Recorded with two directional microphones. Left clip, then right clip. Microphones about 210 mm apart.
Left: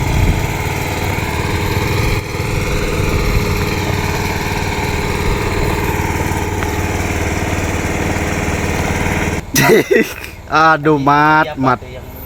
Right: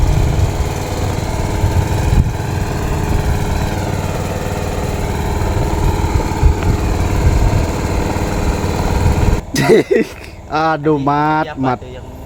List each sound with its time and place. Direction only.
8.8 s lawn mower: centre (ahead or behind)
10.5 s speech: centre (ahead or behind)